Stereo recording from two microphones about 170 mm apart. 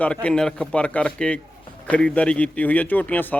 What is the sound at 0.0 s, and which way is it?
A man's voice, 5° left (ahead or behind).